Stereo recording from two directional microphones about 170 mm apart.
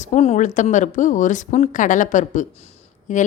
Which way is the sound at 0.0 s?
40° left (ahead or behind).